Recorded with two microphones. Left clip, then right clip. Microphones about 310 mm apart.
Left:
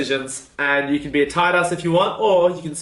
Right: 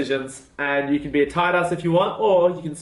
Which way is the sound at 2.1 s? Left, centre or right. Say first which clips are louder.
Left 1 dB; right.